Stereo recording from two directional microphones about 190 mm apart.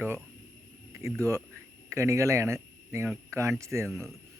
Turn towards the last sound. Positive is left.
turn(degrees=-15)  # may be behind; listen again after turning